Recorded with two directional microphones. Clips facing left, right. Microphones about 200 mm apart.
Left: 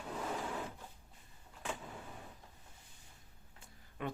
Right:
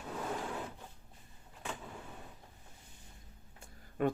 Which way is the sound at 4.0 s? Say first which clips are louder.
Right 9 dB; 45° right (ahead or behind).